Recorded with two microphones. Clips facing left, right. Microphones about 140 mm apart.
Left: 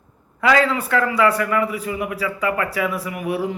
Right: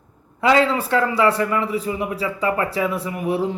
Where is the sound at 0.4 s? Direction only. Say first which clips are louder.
Right 1 dB; 25° right (ahead or behind).